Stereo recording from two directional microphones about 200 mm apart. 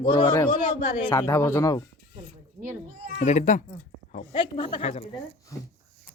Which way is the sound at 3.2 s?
35° left (ahead or behind).